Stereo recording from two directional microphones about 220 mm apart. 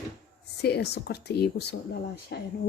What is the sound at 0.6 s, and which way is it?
Speech, 50° left (ahead or behind).